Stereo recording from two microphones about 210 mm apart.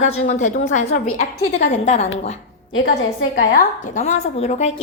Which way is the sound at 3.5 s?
35° left (ahead or behind).